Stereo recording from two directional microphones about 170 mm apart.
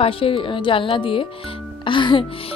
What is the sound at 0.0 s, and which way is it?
A woman's voice, 30° left (ahead or behind).